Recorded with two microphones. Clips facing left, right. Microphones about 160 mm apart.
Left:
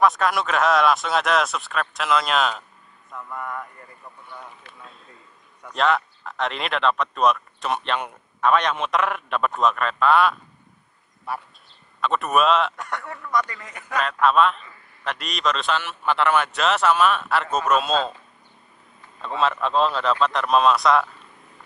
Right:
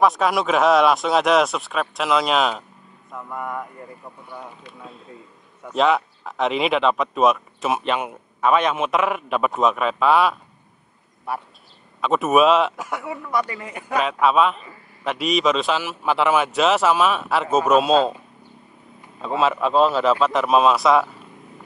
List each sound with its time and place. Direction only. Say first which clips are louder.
0.0 s speech: right 2 dB; centre (ahead or behind)
3.1 s speech: right 3 dB; 15° right (ahead or behind)
12.0 s speech: right 4 dB; centre (ahead or behind)
13.6 s speech: right 6 dB; 20° right (ahead or behind)
13.9 s speech: right 1 dB; 5° right (ahead or behind)
19.2 s speech: right 3 dB; 5° right (ahead or behind)